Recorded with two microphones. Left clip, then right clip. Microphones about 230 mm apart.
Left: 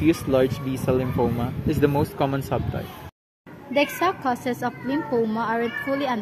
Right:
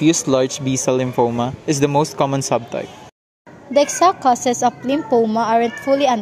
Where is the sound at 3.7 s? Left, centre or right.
Right.